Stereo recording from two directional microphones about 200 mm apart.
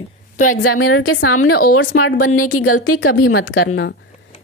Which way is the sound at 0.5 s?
90° left.